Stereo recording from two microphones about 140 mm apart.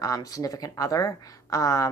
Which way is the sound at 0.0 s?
25° left (ahead or behind).